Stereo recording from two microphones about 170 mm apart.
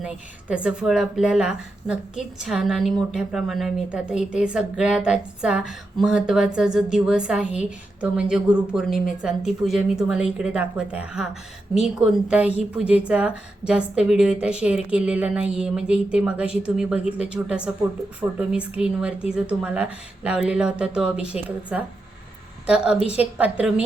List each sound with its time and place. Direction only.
0.0 s a woman's voice: 5° right (ahead or behind)